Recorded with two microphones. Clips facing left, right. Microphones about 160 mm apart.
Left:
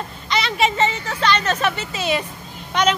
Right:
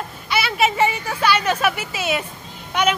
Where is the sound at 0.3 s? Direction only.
10° right (ahead or behind).